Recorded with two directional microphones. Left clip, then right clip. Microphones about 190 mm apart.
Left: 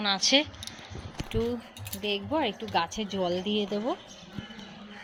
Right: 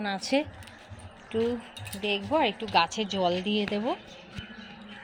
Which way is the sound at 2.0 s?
25° right (ahead or behind).